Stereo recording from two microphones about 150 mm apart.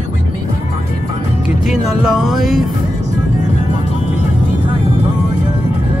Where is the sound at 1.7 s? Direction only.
5° right (ahead or behind).